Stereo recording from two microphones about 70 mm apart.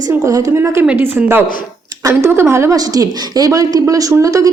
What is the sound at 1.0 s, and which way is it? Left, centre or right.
A woman's voice, right.